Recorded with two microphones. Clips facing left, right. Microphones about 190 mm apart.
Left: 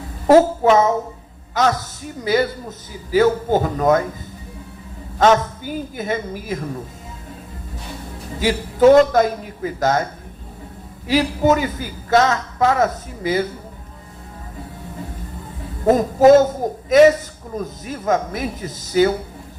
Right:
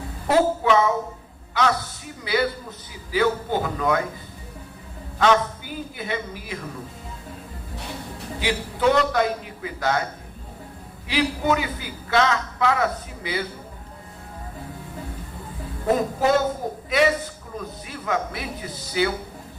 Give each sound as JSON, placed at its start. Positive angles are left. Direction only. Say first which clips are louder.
{"t": 0.3, "sound": "a woman's voice", "louder": "left 7 dB", "side_deg": 45}
{"t": 5.2, "sound": "a woman's voice", "louder": "left 4 dB", "side_deg": 45}
{"t": 8.4, "sound": "a woman's voice", "louder": "left 9 dB", "side_deg": 45}
{"t": 11.1, "sound": "a woman's voice", "louder": "left 6 dB", "side_deg": 45}
{"t": 15.9, "sound": "a woman's voice", "louder": "left 9 dB", "side_deg": 45}